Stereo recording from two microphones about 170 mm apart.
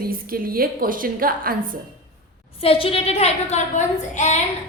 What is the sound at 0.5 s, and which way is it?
A woman's voice, 60° right (ahead or behind).